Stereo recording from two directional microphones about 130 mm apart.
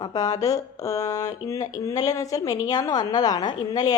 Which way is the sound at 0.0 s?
30° left (ahead or behind).